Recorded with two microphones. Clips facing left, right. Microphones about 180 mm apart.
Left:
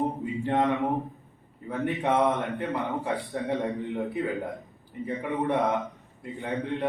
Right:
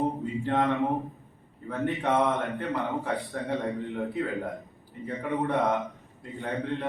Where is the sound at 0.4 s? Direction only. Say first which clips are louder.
Left 1 dB; 20° left (ahead or behind).